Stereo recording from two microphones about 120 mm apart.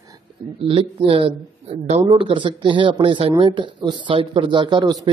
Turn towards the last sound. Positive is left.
turn(degrees=-40)  # may be behind; listen again after turning